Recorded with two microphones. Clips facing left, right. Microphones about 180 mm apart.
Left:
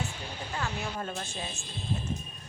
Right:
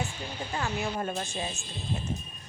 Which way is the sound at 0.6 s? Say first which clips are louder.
Right 4 dB; 15° right (ahead or behind).